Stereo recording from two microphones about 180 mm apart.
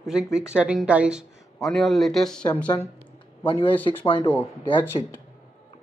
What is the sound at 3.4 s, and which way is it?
Speech, 30° left (ahead or behind).